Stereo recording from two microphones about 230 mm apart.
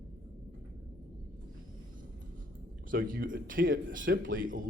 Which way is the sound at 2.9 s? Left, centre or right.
Right.